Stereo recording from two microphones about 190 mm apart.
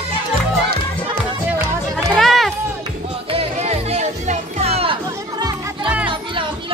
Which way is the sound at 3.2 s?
30° right (ahead or behind).